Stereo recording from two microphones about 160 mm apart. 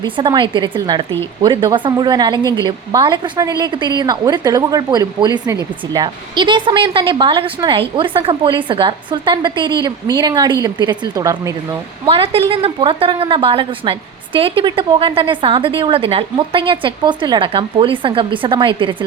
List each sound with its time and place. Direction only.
0.0 s a woman's voice: 30° right (ahead or behind)
12.0 s a woman's voice: 35° right (ahead or behind)